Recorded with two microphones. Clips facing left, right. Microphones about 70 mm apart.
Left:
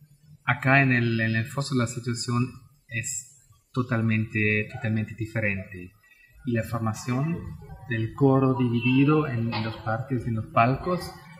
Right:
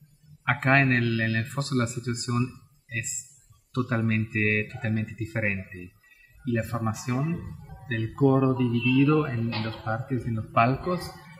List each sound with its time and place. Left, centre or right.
0.5 s speech: centre
8.6 s speech: left
9.1 s speech: centre